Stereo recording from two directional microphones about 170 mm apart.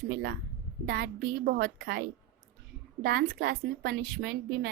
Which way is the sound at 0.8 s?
65° right (ahead or behind).